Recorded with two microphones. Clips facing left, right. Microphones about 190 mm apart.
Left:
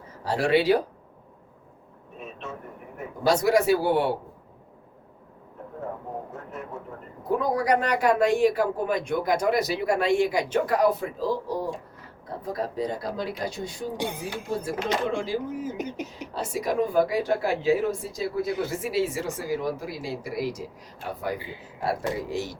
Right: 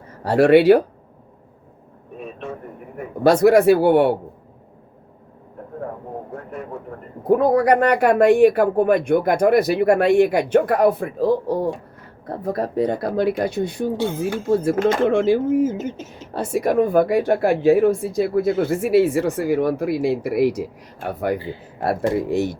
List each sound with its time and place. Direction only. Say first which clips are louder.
0.1 s speech: right 10 dB; 60° right (ahead or behind)
3.2 s speech: right 8 dB; 60° right (ahead or behind)
7.3 s speech: right 8 dB; 60° right (ahead or behind)
13.9 s speech: right 7 dB; 15° left (ahead or behind)
14.2 s speech: right 11 dB; 60° right (ahead or behind)
16.0 s speech: left 2 dB; 15° left (ahead or behind)
16.3 s speech: right 8 dB; 55° right (ahead or behind)
21.3 s speech: right 8 dB; 15° left (ahead or behind)
21.8 s speech: right 7 dB; 55° right (ahead or behind)